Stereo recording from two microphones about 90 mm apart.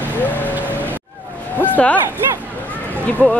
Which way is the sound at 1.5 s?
20° left (ahead or behind).